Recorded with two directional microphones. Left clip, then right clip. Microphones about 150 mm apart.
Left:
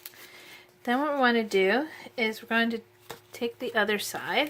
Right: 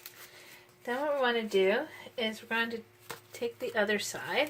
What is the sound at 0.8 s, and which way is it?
Speech, 65° left (ahead or behind).